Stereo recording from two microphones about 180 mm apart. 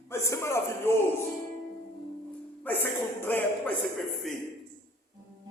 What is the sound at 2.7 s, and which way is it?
Music, 10° left (ahead or behind).